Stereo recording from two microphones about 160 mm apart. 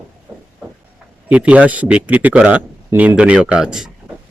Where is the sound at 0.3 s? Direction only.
10° right (ahead or behind).